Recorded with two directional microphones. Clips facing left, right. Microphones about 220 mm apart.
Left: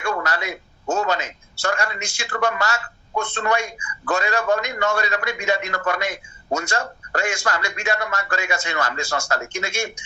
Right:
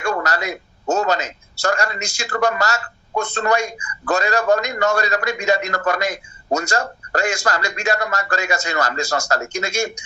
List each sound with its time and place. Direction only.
0.0 s a man's voice: 40° right (ahead or behind)